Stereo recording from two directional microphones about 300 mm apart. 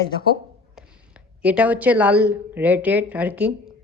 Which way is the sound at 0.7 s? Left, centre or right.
Centre.